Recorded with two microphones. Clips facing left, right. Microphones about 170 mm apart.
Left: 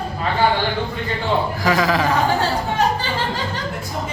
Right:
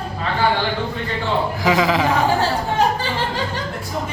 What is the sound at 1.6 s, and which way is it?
Speech, 15° right (ahead or behind).